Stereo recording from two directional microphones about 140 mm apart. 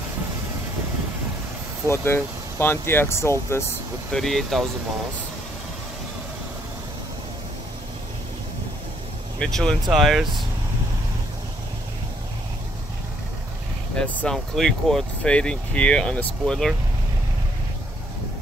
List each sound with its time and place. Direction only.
1.9 s speech: 15° left (ahead or behind)
4.1 s speech: centre (ahead or behind)
9.4 s speech: 5° left (ahead or behind)
13.9 s speech: 5° left (ahead or behind)